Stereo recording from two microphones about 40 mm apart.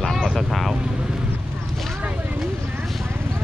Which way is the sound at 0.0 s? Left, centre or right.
Centre.